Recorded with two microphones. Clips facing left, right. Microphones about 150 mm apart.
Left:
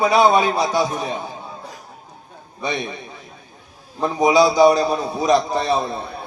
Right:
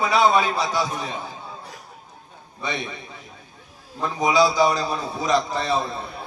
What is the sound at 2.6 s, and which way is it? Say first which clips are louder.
Speech: left 4 dB; 15° left (ahead or behind).